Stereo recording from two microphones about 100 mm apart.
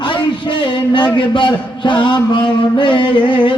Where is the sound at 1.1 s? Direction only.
50° left (ahead or behind).